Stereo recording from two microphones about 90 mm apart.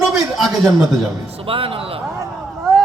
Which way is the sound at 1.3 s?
90° right.